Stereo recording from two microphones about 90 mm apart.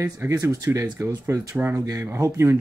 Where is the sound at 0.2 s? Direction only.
35° right (ahead or behind).